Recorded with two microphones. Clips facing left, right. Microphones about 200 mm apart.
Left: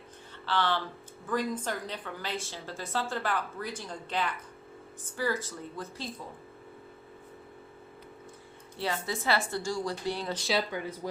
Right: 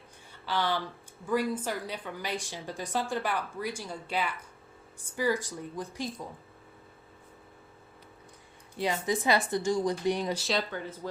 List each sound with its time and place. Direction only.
0.4 s a woman's voice: 10° right (ahead or behind)
8.8 s a woman's voice: 15° right (ahead or behind)
10.3 s speech: centre (ahead or behind)
10.7 s speech: 15° left (ahead or behind)